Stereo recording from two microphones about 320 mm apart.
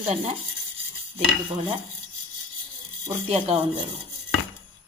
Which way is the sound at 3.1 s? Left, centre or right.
Centre.